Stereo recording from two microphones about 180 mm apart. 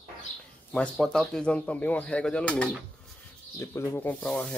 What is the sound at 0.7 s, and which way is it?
Speech, 5° left (ahead or behind).